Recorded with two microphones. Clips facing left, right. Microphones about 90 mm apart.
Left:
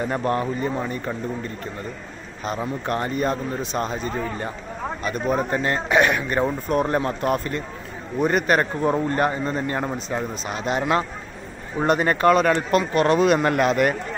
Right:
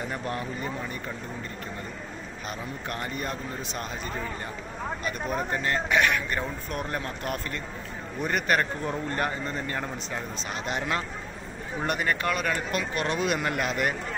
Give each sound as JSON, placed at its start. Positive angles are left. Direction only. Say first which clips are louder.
{"t": 0.1, "sound": "speech", "louder": "left 9 dB", "side_deg": 50}
{"t": 2.9, "sound": "a man's voice", "louder": "left 10 dB", "side_deg": 35}
{"t": 10.8, "sound": "a man's voice", "louder": "left 8 dB", "side_deg": 30}